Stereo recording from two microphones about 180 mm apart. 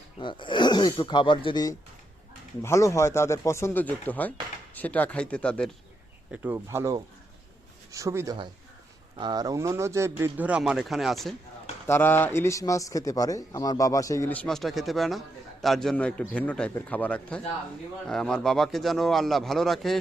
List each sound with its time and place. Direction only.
0.2 s a man's voice: 25° left (ahead or behind); by 5.7 s 5° left (ahead or behind)
6.3 s speech: 10° right (ahead or behind)
11.9 s a man's voice: 10° left (ahead or behind)